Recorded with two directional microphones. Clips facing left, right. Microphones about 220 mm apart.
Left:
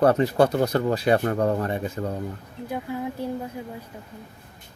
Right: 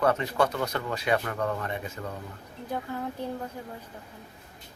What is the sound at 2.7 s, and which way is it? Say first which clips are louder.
Speech: left 3 dB; 10° left (ahead or behind).